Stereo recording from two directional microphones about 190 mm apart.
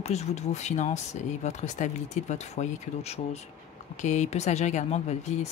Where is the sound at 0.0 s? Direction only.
35° left (ahead or behind).